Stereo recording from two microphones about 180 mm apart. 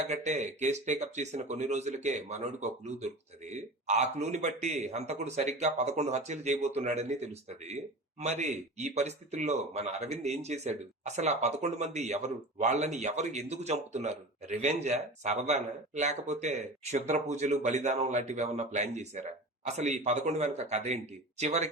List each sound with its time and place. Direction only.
0.1 s speech: 40° right (ahead or behind)